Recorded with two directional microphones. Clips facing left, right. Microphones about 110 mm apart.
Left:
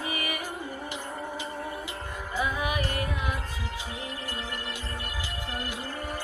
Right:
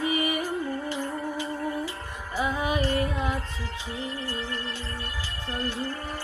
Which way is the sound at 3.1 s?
25° right (ahead or behind).